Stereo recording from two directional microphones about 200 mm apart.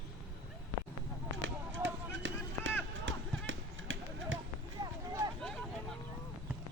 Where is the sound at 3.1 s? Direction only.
70° right (ahead or behind).